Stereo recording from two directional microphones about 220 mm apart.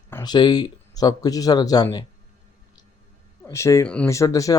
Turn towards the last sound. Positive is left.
turn(degrees=15)  # may be behind; listen again after turning